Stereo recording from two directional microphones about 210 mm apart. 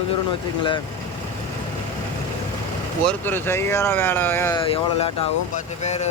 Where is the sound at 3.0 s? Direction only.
10° left (ahead or behind).